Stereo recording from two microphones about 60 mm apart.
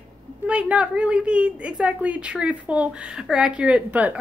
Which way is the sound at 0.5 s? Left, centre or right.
Right.